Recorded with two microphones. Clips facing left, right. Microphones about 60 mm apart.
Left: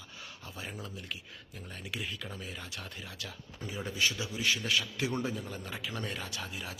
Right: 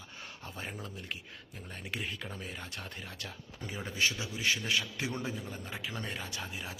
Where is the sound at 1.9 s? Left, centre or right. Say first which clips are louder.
Right 1 dB; right.